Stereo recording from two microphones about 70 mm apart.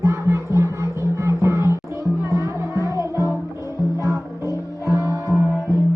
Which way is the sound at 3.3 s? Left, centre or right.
Left.